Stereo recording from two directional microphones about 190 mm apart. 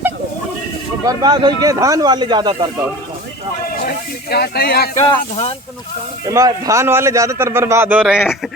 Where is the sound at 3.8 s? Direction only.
55° left (ahead or behind).